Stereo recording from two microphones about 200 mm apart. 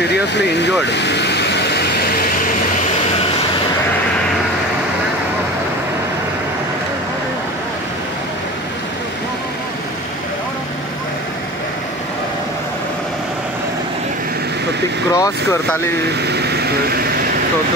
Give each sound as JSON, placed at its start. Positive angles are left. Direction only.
{"t": 0.0, "sound": "speech", "side_deg": 60}
{"t": 0.8, "sound": "vehicle", "side_deg": 60}
{"t": 15.1, "sound": "speech", "side_deg": 15}
{"t": 16.2, "sound": "vehicle", "side_deg": -55}